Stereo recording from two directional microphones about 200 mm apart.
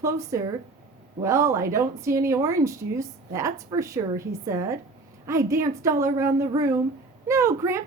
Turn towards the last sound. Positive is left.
turn(degrees=-15)  # may be behind; listen again after turning